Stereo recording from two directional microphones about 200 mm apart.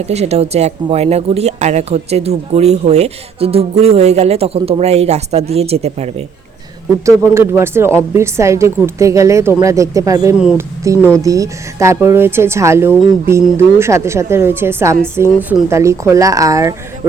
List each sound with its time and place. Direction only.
0.0 s speech: 35° right (ahead or behind)
7.0 s a woman's voice: 15° right (ahead or behind)
10.9 s speech: 10° left (ahead or behind)
11.2 s a woman's voice: 15° right (ahead or behind)